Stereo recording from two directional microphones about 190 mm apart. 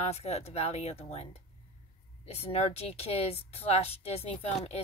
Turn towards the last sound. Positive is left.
turn(degrees=35)  # may be behind; listen again after turning